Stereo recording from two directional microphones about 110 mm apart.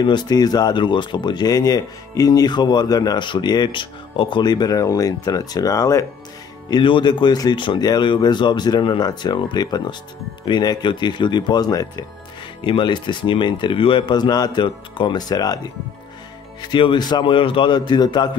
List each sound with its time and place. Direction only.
0.0 s speech: 40° left (ahead or behind)
6.7 s speech: 45° left (ahead or behind)
12.6 s speech: 50° left (ahead or behind)
16.7 s speech: 45° left (ahead or behind)